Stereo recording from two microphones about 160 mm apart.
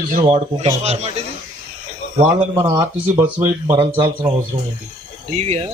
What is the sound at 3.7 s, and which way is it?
Speech, 30° right (ahead or behind).